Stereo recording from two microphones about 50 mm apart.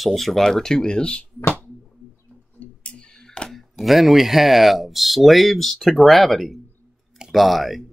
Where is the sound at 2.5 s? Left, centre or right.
Left.